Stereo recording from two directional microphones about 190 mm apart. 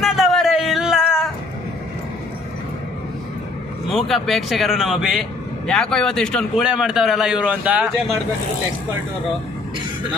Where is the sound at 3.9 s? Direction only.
Centre (ahead or behind).